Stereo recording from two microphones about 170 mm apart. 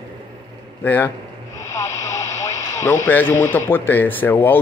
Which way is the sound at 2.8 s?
10° left (ahead or behind).